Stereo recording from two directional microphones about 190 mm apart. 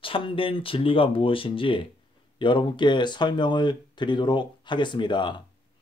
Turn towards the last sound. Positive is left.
turn(degrees=25)  # may be behind; listen again after turning